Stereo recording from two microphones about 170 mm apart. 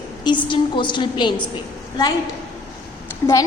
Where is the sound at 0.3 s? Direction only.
30° left (ahead or behind).